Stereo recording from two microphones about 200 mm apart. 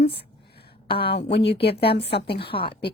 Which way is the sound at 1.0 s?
55° left (ahead or behind).